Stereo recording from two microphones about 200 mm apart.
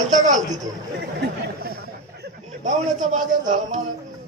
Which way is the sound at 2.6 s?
40° right (ahead or behind).